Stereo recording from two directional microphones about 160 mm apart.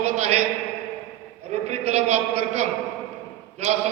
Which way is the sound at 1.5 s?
45° right (ahead or behind).